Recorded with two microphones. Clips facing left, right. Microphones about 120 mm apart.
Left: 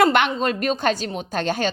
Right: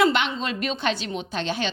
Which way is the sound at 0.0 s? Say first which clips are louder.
Left 4 dB; 50° left (ahead or behind).